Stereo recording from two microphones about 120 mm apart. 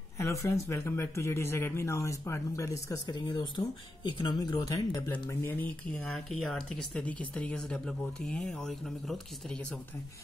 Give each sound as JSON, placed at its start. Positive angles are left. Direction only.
{"t": 0.2, "sound": "speech", "side_deg": 25}